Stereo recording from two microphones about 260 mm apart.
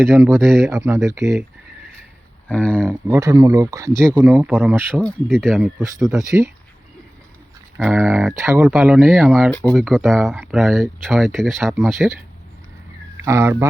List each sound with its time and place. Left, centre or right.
0.0 s speech: centre
2.5 s speech: centre
3.1 s speech: centre
4.9 s speech: centre
5.8 s speech: centre
7.8 s speech: centre
8.6 s speech: centre
13.2 s speech: centre